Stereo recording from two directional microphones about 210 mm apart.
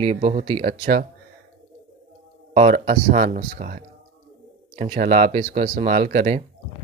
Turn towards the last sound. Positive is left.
turn(degrees=-35)  # may be behind; listen again after turning